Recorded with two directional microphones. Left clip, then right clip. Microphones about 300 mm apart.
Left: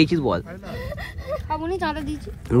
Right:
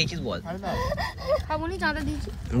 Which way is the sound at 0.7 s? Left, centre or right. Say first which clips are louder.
Right 5 dB; right.